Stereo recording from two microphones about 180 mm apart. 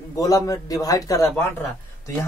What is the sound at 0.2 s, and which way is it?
A man's voice, 20° left (ahead or behind).